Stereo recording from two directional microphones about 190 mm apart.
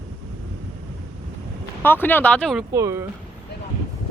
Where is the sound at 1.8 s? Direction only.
10° left (ahead or behind).